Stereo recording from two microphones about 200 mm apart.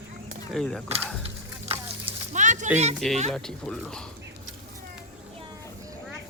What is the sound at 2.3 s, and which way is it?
Speech, 40° right (ahead or behind).